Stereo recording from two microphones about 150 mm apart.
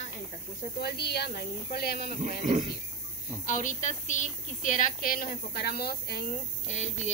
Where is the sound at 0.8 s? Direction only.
90° left.